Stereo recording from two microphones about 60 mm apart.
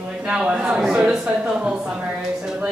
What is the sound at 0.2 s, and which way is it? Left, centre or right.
A man's voice, centre.